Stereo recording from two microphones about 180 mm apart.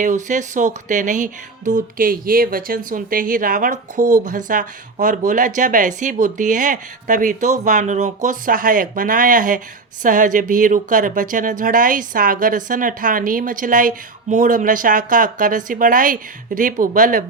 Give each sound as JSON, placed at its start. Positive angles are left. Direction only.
{"t": 0.0, "sound": "speech", "side_deg": -45}